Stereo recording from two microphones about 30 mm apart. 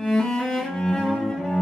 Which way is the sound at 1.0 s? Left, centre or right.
Centre.